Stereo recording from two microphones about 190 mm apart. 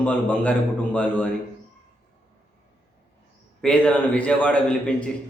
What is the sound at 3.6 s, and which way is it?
A man's voice, 5° left (ahead or behind).